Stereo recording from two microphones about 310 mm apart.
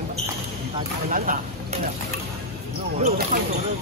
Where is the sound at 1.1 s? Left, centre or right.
Right.